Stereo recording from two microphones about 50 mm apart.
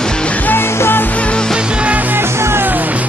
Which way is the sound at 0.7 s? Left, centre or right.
Left.